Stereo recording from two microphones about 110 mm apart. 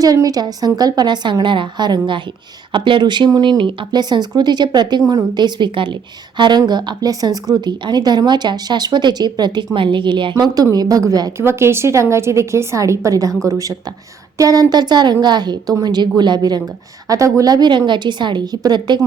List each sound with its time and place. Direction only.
0.0 s a woman's voice: 35° right (ahead or behind)
11.3 s a woman's voice: 25° right (ahead or behind); by 18.9 s 40° right (ahead or behind)